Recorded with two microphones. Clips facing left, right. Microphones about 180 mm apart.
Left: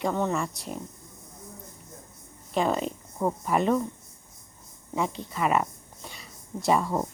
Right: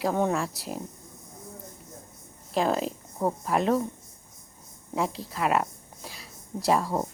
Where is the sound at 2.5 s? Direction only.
Centre (ahead or behind).